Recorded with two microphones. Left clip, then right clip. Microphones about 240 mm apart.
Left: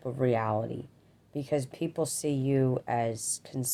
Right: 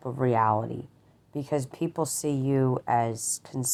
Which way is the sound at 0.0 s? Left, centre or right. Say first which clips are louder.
Right 4 dB; centre.